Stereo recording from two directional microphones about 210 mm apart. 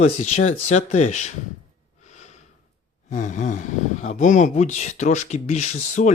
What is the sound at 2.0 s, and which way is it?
Snort, 35° left (ahead or behind).